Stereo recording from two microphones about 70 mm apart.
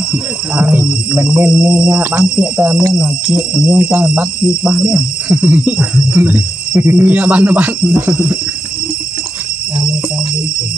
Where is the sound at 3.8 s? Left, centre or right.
Right.